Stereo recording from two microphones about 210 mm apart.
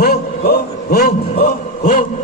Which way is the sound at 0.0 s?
45° left (ahead or behind).